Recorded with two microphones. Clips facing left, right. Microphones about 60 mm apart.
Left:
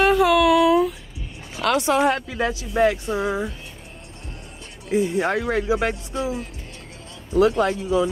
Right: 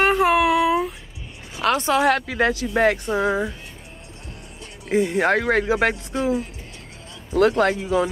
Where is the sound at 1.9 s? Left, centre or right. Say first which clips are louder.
Right 1 dB; right.